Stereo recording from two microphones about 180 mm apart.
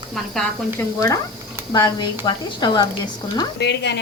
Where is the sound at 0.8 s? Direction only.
20° left (ahead or behind).